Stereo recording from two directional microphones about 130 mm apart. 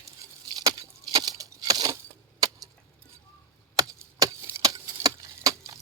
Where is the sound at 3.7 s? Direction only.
25° right (ahead or behind).